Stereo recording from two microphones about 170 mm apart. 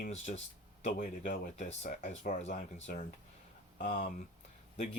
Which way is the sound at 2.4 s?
40° left (ahead or behind).